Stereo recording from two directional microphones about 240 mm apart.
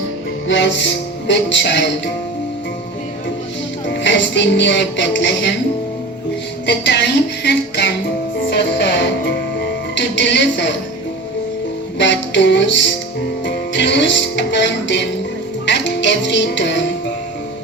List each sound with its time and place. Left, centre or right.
0.4 s speech: left
3.9 s music: left
6.7 s music: left
11.9 s music: left